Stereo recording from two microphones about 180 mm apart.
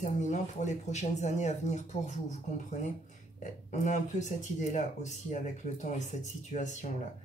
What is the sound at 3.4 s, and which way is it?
Speech, 45° left (ahead or behind).